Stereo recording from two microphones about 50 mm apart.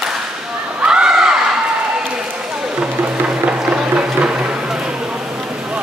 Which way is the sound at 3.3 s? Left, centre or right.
Centre.